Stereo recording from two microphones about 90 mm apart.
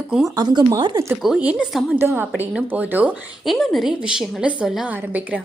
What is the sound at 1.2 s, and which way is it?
Speech, 10° right (ahead or behind).